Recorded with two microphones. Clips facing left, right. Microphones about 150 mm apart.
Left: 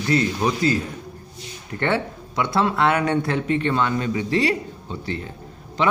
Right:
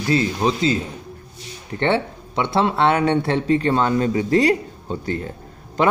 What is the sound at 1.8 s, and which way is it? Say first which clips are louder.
A man's voice: right 3 dB; 25° right (ahead or behind).